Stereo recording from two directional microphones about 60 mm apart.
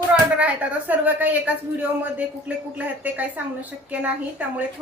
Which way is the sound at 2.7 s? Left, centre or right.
Right.